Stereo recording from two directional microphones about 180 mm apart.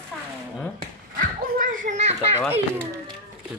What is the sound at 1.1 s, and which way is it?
Children playing, 50° right (ahead or behind).